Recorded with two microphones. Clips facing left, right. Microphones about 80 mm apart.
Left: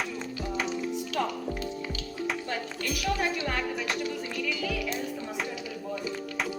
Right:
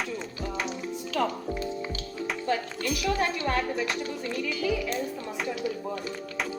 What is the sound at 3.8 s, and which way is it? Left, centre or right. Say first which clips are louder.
Music: right 2 dB; centre.